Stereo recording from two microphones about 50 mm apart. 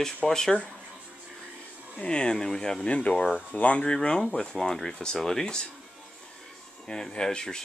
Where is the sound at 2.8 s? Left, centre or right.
Left.